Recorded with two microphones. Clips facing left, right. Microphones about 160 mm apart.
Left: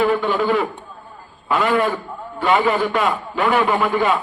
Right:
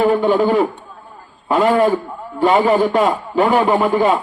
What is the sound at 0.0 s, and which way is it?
A man's voice, 40° right (ahead or behind).